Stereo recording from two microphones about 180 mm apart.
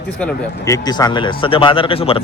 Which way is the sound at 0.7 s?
20° left (ahead or behind).